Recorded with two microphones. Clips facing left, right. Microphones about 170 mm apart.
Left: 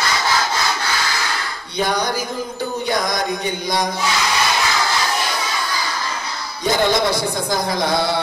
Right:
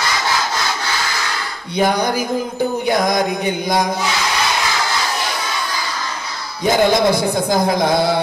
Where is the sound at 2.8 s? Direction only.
50° right (ahead or behind).